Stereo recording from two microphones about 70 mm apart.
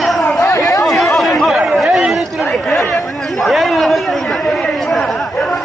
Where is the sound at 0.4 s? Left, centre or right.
Left.